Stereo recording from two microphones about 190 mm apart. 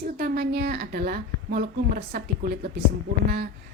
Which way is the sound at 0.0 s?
55° right (ahead or behind).